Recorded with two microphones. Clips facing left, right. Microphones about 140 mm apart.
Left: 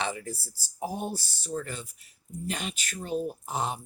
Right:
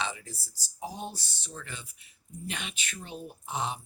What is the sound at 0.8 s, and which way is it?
Speech, 50° left (ahead or behind).